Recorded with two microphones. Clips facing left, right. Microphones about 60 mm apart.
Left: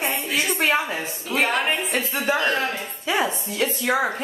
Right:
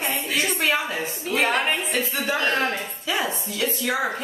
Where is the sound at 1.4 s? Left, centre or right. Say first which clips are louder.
Even; centre.